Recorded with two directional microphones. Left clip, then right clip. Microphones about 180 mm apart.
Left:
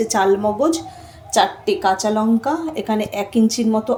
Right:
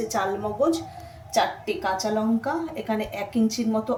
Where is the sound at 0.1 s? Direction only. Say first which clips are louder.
Left 10 dB; 45° left (ahead or behind).